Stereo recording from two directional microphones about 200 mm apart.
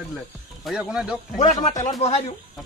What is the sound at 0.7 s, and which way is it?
Speech, 5° right (ahead or behind).